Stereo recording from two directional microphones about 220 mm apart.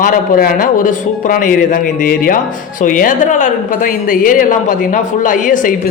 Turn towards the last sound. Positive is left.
turn(degrees=35)  # may be behind; listen again after turning